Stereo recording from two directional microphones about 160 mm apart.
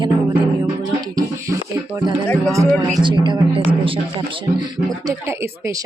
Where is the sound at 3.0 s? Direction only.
30° right (ahead or behind).